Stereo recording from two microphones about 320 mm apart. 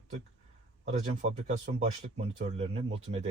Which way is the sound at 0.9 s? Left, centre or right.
Right.